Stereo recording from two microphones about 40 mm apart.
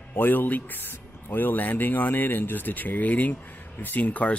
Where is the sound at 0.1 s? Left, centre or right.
Left.